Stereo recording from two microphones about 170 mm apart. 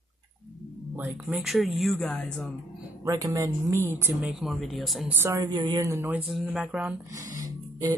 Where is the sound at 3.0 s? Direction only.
20° right (ahead or behind); by 5.1 s centre (ahead or behind).